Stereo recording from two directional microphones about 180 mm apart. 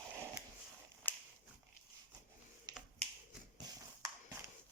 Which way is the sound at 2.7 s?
25° right (ahead or behind).